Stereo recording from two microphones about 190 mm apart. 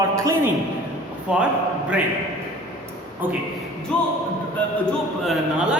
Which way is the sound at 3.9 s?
5° left (ahead or behind).